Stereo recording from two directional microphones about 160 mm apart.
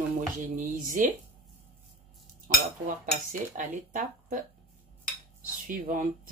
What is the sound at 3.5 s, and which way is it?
Speech, 55° right (ahead or behind).